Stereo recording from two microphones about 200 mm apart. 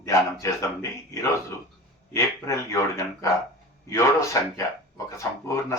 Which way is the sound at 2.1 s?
15° left (ahead or behind).